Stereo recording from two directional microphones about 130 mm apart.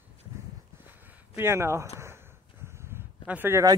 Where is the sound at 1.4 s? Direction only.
20° right (ahead or behind).